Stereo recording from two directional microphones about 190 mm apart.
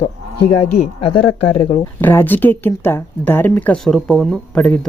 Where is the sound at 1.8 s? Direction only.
10° left (ahead or behind).